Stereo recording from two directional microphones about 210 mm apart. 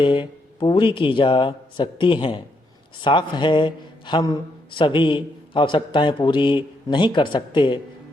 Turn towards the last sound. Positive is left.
turn(degrees=20)  # may be behind; listen again after turning